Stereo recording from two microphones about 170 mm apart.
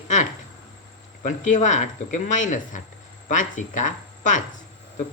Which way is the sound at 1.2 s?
45° left (ahead or behind).